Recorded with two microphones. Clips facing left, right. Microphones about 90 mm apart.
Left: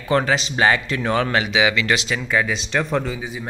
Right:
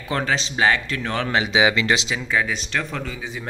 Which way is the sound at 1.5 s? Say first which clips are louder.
Even; 30° right (ahead or behind).